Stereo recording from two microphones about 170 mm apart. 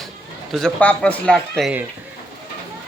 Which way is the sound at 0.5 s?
5° left (ahead or behind).